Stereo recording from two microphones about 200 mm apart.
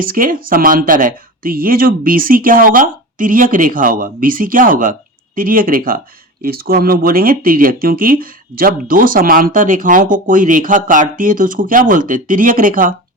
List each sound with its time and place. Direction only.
0.0 s speech: 45° right (ahead or behind)